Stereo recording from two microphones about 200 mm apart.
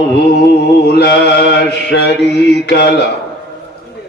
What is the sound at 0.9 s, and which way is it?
Mantra, 55° left (ahead or behind).